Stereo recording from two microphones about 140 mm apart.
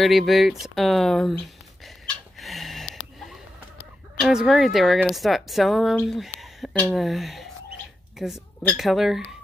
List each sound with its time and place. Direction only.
0.0 s a woman's voice: centre (ahead or behind)
2.3 s a sound: centre (ahead or behind)
4.2 s a woman's voice: centre (ahead or behind)